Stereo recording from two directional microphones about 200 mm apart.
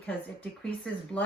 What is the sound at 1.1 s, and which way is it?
Speech, 5° left (ahead or behind).